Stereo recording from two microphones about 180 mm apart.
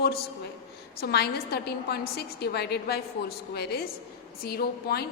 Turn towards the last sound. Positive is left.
turn(degrees=60)  # may be behind; listen again after turning